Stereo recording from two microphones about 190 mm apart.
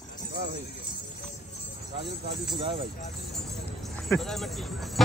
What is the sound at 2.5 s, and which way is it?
Speech, 30° right (ahead or behind).